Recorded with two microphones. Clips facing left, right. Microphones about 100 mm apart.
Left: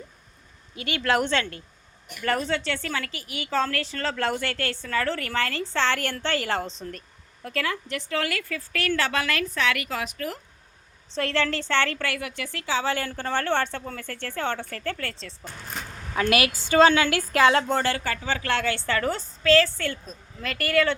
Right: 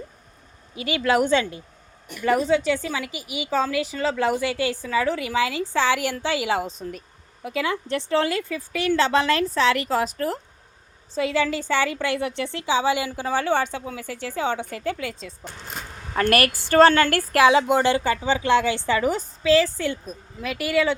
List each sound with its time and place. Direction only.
0.9 s a woman's voice: 10° right (ahead or behind)
7.9 s a woman's voice: 30° right (ahead or behind)
11.1 s a woman's voice: 5° right (ahead or behind)
12.1 s a woman's voice: 25° right (ahead or behind); by 15.5 s 10° right (ahead or behind)
16.3 s a woman's voice: 5° left (ahead or behind)
17.3 s a woman's voice: 5° right (ahead or behind)